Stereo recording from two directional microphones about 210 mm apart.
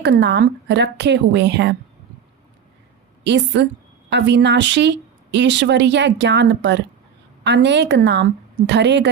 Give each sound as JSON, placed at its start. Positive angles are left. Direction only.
{"t": 0.0, "sound": "speech", "side_deg": -55}
{"t": 3.2, "sound": "speech", "side_deg": -55}